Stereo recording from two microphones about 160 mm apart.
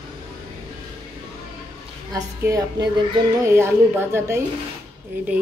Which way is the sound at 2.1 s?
20° right (ahead or behind).